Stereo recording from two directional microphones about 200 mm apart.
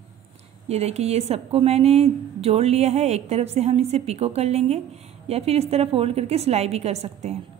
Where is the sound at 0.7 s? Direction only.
30° right (ahead or behind).